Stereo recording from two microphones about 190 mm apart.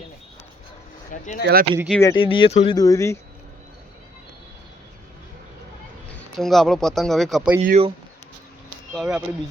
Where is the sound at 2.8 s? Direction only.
15° left (ahead or behind).